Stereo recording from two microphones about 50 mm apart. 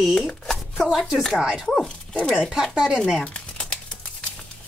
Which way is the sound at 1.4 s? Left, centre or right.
Centre.